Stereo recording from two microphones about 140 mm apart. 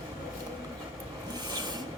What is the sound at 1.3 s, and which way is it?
Filing, 30° right (ahead or behind).